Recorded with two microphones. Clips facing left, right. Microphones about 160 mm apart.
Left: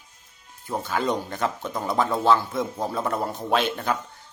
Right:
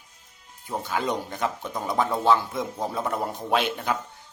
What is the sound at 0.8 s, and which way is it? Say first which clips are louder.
Speech: left 2 dB; 15° right (ahead or behind).